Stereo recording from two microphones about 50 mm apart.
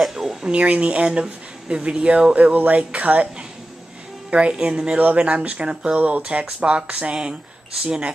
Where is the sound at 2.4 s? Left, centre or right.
Right.